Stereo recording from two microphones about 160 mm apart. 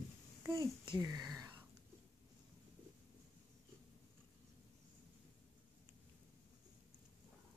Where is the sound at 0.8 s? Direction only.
25° right (ahead or behind).